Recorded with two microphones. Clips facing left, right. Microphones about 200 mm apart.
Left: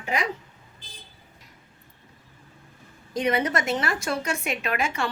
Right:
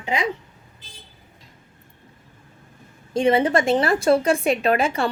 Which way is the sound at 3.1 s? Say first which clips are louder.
Right 6 dB; 30° right (ahead or behind).